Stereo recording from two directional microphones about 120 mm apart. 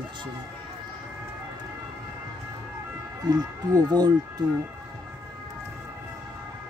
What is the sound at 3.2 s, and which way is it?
Speech, 30° right (ahead or behind).